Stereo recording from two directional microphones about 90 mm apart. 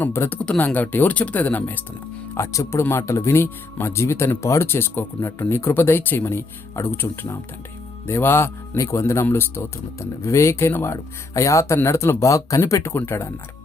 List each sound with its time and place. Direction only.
0.0 s speech: 25° left (ahead or behind)
0.3 s speech: 15° left (ahead or behind)
2.3 s speech: 35° left (ahead or behind)